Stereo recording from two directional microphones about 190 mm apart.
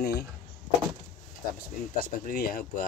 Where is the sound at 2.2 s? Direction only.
50° left (ahead or behind).